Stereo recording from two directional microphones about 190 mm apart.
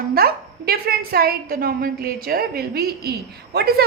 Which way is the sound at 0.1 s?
55° right (ahead or behind).